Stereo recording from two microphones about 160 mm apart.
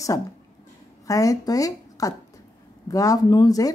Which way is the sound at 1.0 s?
20° left (ahead or behind).